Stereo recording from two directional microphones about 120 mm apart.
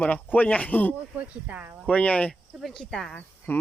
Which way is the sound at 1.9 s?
10° left (ahead or behind).